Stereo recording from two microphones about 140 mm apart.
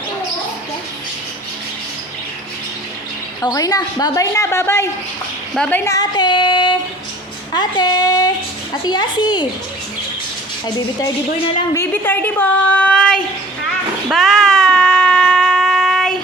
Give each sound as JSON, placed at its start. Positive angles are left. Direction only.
{"t": 3.4, "sound": "a woman's voice", "side_deg": 25}
{"t": 5.5, "sound": "speech", "side_deg": 5}
{"t": 5.8, "sound": "a woman's voice", "side_deg": 25}
{"t": 7.5, "sound": "a woman's voice", "side_deg": 30}
{"t": 11.7, "sound": "speech", "side_deg": 15}
{"t": 14.1, "sound": "a sound", "side_deg": 0}